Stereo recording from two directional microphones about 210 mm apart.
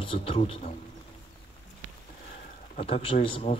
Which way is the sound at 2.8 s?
25° left (ahead or behind).